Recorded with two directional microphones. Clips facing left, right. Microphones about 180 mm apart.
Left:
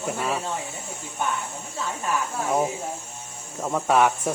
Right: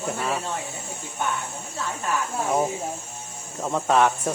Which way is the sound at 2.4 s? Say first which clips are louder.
Even; centre (ahead or behind).